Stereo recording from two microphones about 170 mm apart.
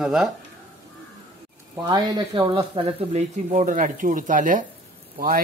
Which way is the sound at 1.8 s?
25° right (ahead or behind).